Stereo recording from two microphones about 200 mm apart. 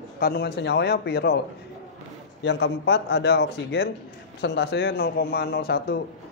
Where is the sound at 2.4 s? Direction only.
60° left (ahead or behind).